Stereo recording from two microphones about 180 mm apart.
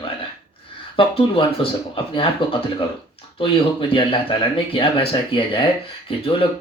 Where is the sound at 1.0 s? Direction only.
30° left (ahead or behind).